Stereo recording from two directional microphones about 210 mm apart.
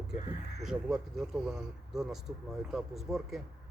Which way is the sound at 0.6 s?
5° right (ahead or behind).